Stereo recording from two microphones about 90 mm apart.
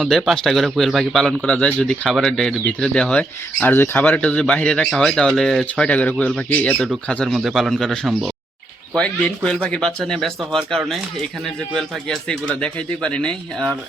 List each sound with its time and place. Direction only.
0.0 s speech: centre (ahead or behind)
1.5 s speech: 15° left (ahead or behind)
7.3 s speech: 5° right (ahead or behind)
9.0 s speech: 10° left (ahead or behind)